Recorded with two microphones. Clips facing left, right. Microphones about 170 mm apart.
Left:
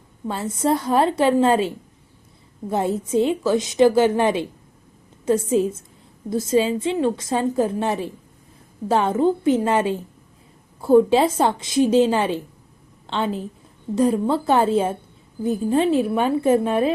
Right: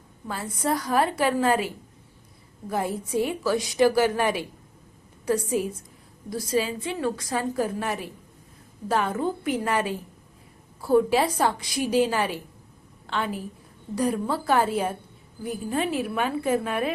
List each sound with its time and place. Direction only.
0.3 s a woman's voice: 25° left (ahead or behind)